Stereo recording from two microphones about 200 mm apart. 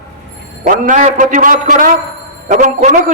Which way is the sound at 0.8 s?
40° right (ahead or behind).